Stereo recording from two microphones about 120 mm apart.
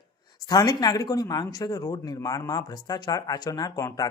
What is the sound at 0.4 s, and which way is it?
Speech, 35° left (ahead or behind).